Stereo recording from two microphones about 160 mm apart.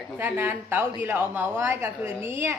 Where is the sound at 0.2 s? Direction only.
15° right (ahead or behind).